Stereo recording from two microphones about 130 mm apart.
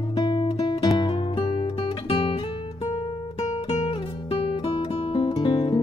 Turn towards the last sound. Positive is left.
turn(degrees=40)  # may be behind; listen again after turning